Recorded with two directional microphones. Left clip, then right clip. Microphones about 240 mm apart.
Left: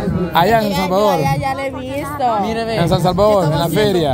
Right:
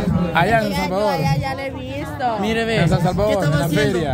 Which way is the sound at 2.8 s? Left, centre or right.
Left.